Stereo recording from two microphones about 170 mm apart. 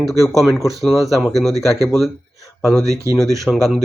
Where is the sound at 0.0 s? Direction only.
Centre (ahead or behind).